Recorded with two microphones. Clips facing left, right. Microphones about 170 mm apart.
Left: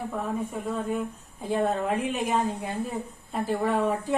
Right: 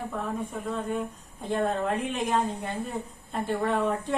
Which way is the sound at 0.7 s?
5° left (ahead or behind).